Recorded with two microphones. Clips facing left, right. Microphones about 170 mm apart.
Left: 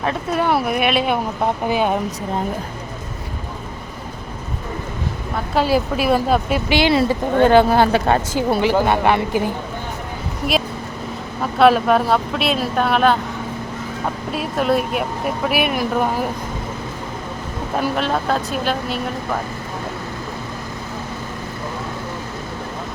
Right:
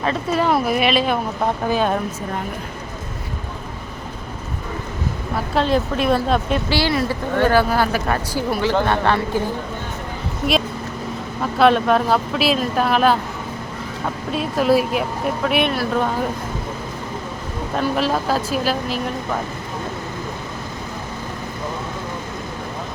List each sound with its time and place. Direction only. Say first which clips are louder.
0.0 s speech: even; 5° left (ahead or behind)
1.6 s speech: even; 15° left (ahead or behind)
5.5 s speech: left 1 dB; 5° left (ahead or behind)
6.7 s speech: left 7 dB; 20° left (ahead or behind)
8.6 s speech: left 1 dB; 15° left (ahead or behind)
11.5 s speech: left 1 dB; centre (ahead or behind)
14.3 s speech: right 2 dB; centre (ahead or behind)
17.9 s speech: even; 5° right (ahead or behind)